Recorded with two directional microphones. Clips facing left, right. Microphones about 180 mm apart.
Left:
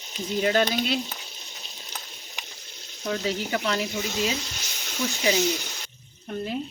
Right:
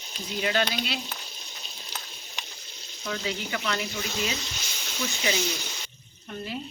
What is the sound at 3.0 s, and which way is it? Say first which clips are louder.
Speech: left 4 dB; 35° left (ahead or behind).